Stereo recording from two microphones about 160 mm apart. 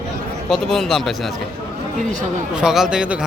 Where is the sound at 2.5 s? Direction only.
5° right (ahead or behind).